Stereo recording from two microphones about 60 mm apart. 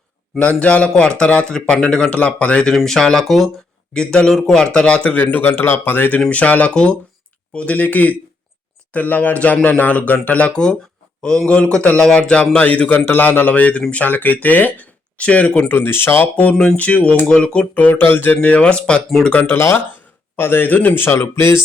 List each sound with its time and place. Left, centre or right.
0.3 s speech: left
2.7 s speech: centre; by 10.5 s left
10.5 s speech: centre
13.1 s speech: left
15.7 s speech: left
16.3 s speech: left
17.8 s speech: left
18.4 s speech: left
19.5 s speech: left